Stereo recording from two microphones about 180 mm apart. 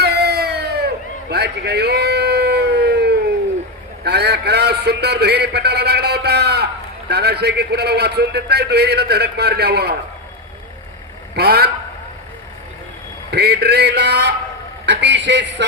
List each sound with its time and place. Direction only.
0.0 s a sound: 65° right (ahead or behind)
7.1 s a man's voice: 65° right (ahead or behind)
11.3 s a man's voice: 60° right (ahead or behind)
13.3 s a man's voice: 65° right (ahead or behind)